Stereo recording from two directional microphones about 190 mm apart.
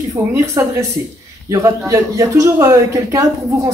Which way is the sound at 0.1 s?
15° right (ahead or behind).